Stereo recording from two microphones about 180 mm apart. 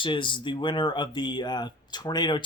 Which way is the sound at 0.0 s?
25° left (ahead or behind).